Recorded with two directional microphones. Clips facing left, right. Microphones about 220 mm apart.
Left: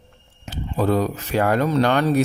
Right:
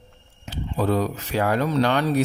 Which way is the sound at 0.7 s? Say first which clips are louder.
Left 2 dB; 50° left (ahead or behind).